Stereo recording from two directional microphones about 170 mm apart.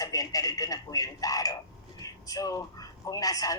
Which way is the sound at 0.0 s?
20° left (ahead or behind).